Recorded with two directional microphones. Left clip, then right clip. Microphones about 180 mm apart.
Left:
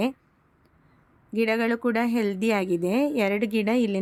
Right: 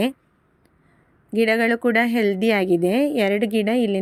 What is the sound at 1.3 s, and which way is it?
A woman's voice, 15° right (ahead or behind).